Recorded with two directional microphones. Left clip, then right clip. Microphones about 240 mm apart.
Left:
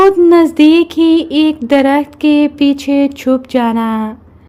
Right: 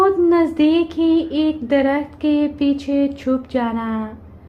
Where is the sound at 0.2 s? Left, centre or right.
Left.